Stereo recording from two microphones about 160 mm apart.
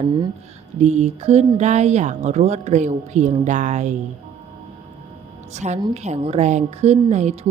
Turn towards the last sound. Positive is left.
turn(degrees=-45)  # may be behind; listen again after turning